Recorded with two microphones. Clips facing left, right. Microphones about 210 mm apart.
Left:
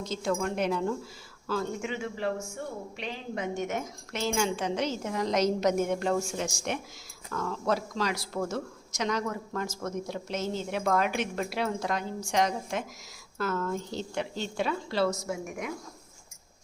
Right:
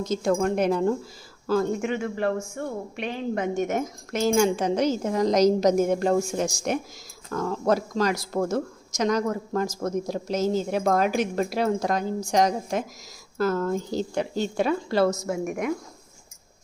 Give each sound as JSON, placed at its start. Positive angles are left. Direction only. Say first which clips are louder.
{"t": 0.0, "sound": "a woman's voice", "louder": "right 7 dB", "side_deg": -45}